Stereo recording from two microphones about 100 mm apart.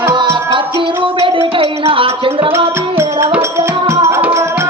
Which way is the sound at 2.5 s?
25° right (ahead or behind).